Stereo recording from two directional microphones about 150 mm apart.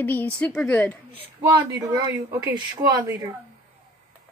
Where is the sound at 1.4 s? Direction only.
25° right (ahead or behind).